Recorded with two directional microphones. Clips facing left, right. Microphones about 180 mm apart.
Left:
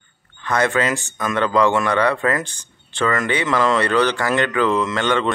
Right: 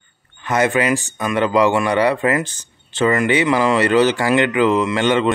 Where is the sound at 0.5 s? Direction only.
20° right (ahead or behind).